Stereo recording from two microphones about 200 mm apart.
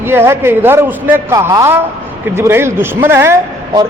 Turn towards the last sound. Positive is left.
turn(degrees=-15)  # may be behind; listen again after turning